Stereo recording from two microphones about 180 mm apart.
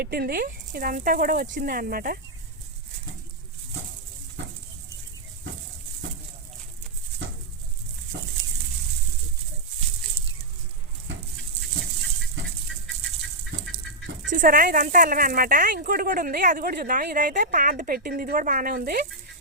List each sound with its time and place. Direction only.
0.0 s speech: 60° right (ahead or behind)
14.3 s speech: 50° right (ahead or behind)